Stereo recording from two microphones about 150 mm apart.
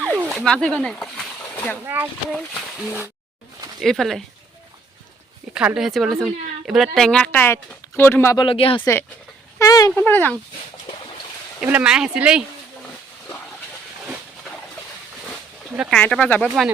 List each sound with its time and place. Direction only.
0.0 s a sound: 10° right (ahead or behind)
0.3 s speech: 5° left (ahead or behind)
1.8 s speech: 15° right (ahead or behind)
2.3 s speech: centre (ahead or behind)
5.5 s speech: 5° right (ahead or behind); by 8.4 s 15° left (ahead or behind)
8.4 s speech: 35° left (ahead or behind)
8.8 s speech: 15° left (ahead or behind)
9.6 s a sound: 25° left (ahead or behind)
9.9 s speech: 15° left (ahead or behind)
11.6 s speech: 5° right (ahead or behind)
15.9 s speech: 5° left (ahead or behind)